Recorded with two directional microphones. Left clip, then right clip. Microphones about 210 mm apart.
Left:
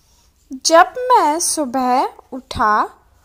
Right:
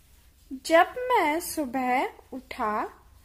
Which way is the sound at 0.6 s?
20° left (ahead or behind).